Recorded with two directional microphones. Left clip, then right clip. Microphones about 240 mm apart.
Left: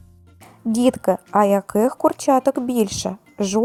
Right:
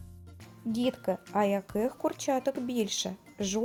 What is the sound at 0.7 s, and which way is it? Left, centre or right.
Speech, left.